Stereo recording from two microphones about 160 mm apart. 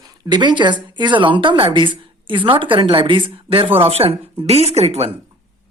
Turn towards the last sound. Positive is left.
turn(degrees=-40)  # may be behind; listen again after turning